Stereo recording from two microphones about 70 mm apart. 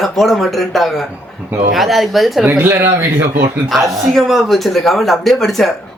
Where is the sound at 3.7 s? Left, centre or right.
Centre.